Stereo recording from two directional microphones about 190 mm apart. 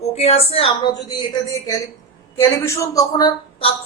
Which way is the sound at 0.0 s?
35° left (ahead or behind).